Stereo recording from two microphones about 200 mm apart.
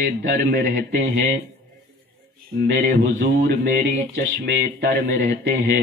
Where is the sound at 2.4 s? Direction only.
45° right (ahead or behind).